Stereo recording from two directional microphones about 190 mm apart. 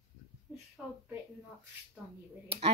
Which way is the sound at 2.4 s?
30° right (ahead or behind).